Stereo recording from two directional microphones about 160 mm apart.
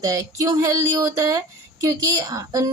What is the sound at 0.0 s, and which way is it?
Speech, 20° right (ahead or behind).